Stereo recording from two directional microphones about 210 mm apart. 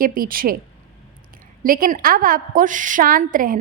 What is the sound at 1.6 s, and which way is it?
A woman's voice, 40° right (ahead or behind).